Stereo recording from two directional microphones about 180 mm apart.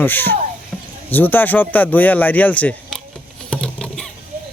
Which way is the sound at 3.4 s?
5° left (ahead or behind).